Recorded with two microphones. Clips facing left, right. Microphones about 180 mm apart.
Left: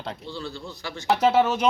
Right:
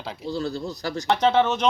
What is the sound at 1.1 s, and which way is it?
Speech, 5° left (ahead or behind).